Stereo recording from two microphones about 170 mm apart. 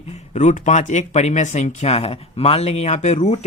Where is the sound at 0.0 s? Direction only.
40° left (ahead or behind).